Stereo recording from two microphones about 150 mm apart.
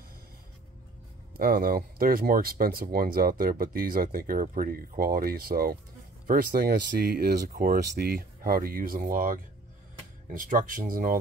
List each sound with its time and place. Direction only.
1.3 s speech: 75° right (ahead or behind)